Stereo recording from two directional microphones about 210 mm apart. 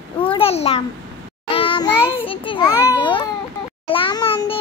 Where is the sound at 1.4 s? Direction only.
25° left (ahead or behind).